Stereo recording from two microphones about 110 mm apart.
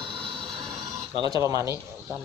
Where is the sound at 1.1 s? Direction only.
45° right (ahead or behind).